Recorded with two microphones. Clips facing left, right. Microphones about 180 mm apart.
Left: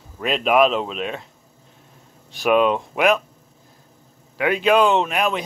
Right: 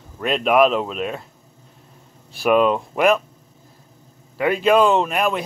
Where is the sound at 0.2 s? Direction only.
Centre (ahead or behind).